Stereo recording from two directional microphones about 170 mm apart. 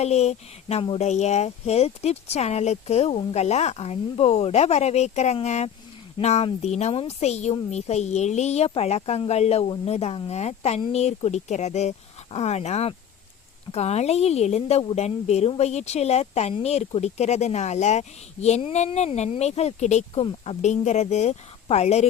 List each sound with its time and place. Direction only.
0.0 s speech: 40° left (ahead or behind)